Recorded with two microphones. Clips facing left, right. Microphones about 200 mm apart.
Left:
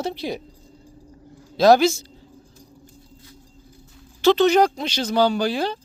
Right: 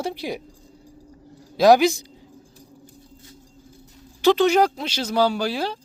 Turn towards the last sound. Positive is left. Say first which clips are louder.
# left 2 dB
turn(degrees=-5)  # may be behind; listen again after turning